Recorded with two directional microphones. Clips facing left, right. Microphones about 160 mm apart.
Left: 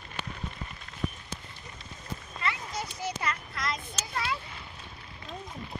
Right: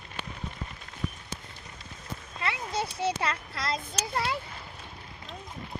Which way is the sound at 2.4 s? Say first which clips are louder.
Right 3 dB; 30° right (ahead or behind).